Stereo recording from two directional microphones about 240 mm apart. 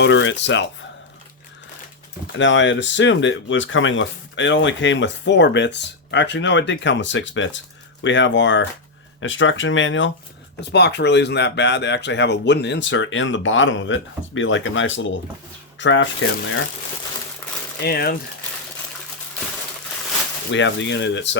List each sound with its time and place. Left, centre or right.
0.0 s speech: left
2.3 s speech: left
17.7 s speech: left
20.5 s speech: left